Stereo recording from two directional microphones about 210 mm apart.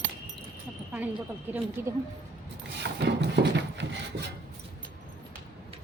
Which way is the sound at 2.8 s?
55° right (ahead or behind).